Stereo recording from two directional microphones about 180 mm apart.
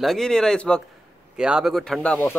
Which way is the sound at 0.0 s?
Centre (ahead or behind).